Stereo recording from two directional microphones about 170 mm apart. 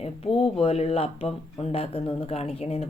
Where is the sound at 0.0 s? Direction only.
35° left (ahead or behind).